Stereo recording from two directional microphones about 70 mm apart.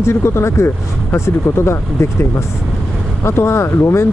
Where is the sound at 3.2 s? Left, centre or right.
Left.